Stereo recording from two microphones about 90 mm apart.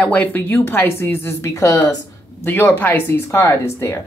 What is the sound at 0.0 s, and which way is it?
Speech, 20° left (ahead or behind).